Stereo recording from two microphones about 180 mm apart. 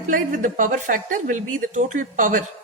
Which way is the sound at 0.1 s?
45° right (ahead or behind).